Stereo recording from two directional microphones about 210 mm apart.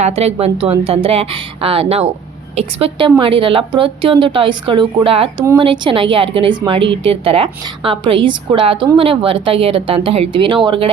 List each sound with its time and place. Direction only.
0.0 s a woman's voice: 30° right (ahead or behind)